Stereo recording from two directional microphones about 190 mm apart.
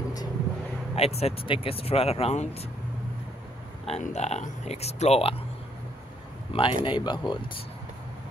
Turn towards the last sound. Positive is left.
turn(degrees=25)  # may be behind; listen again after turning